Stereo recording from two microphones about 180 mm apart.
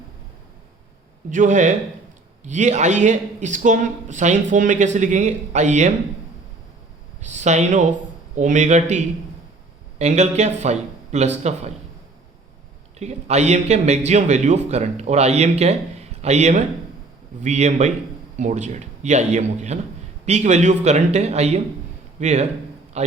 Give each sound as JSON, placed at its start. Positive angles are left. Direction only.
{"t": 1.3, "sound": "a man's voice", "side_deg": -45}
{"t": 7.2, "sound": "a man's voice", "side_deg": -40}
{"t": 13.0, "sound": "a man's voice", "side_deg": -40}
{"t": 23.0, "sound": "a sound", "side_deg": -40}